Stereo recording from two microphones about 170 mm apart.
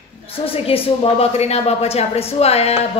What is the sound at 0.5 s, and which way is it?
Speech, 35° left (ahead or behind).